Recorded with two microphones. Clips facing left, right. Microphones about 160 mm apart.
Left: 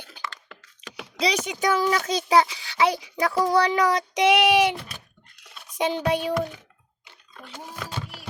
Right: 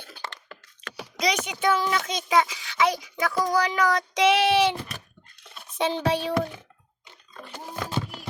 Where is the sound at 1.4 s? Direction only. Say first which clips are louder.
Left 1 dB; 40° left (ahead or behind); by 4.7 s 15° left (ahead or behind).